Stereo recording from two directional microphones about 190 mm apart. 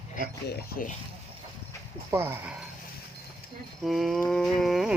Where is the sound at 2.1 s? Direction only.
10° right (ahead or behind).